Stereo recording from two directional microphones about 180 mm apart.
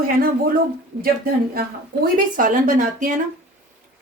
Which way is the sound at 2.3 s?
45° right (ahead or behind).